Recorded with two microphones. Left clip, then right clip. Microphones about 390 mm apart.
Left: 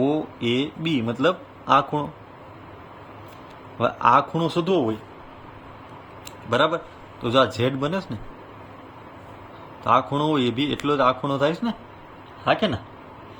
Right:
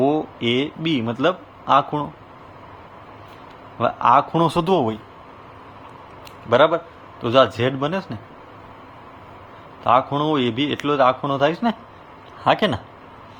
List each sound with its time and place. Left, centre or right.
0.0 s speech: centre
3.8 s a man's voice: centre
6.5 s a man's voice: centre
9.8 s a man's voice: centre